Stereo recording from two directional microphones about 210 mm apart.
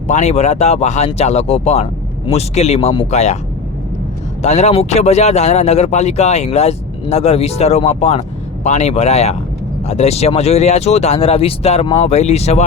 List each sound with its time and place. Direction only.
0.1 s speech: 35° left (ahead or behind)
4.4 s speech: 35° left (ahead or behind)